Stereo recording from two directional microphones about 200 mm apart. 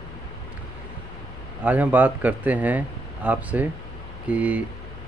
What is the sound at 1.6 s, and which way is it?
Speech, 10° right (ahead or behind).